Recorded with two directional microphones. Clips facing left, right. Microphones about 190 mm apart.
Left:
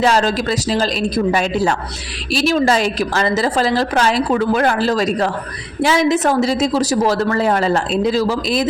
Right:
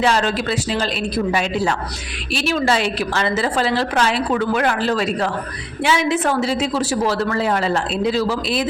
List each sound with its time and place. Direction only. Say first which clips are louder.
0.0 s a woman's voice: left 3 dB; 40° left (ahead or behind)